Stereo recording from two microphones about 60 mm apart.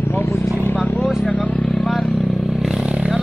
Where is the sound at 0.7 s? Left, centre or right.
Left.